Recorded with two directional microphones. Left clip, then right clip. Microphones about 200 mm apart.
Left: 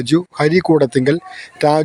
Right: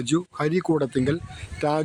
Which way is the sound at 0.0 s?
20° left (ahead or behind).